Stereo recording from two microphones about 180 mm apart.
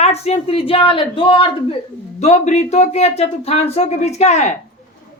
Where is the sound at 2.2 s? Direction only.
40° left (ahead or behind).